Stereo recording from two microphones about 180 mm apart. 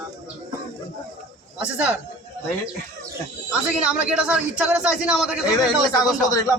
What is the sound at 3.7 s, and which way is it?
A man's voice, 5° right (ahead or behind).